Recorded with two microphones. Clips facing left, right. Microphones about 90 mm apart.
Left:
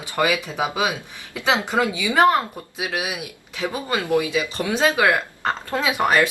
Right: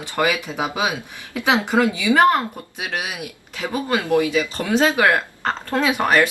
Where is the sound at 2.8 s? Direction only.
10° left (ahead or behind).